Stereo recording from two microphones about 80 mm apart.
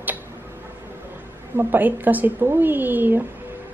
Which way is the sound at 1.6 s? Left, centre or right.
Right.